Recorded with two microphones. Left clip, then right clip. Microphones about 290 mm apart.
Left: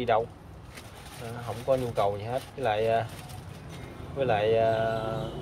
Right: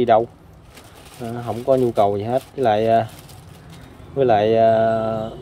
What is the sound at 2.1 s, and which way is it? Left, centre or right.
Speech, right.